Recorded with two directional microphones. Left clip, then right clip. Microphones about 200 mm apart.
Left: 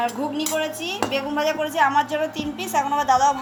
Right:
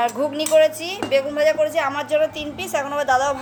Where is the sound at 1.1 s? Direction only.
30° right (ahead or behind).